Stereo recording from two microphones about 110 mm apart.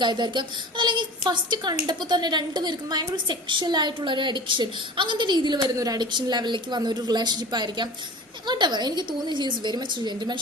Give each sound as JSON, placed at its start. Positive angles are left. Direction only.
{"t": 0.0, "sound": "a woman's voice", "side_deg": -45}